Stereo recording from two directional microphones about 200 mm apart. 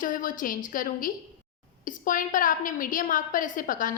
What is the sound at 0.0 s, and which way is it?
A woman's voice, 40° left (ahead or behind).